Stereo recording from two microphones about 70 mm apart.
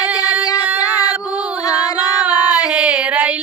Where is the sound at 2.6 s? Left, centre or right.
Centre.